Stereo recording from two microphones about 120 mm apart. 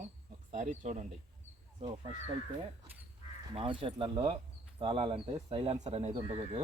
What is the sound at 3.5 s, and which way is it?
Speech, 50° right (ahead or behind).